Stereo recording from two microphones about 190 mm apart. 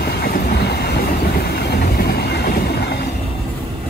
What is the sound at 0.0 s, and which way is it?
Train, 55° left (ahead or behind).